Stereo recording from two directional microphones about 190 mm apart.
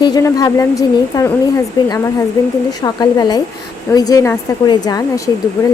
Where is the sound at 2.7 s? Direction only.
20° left (ahead or behind).